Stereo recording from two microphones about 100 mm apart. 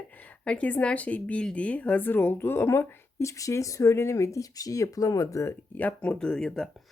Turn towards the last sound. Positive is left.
turn(degrees=5)  # may be behind; listen again after turning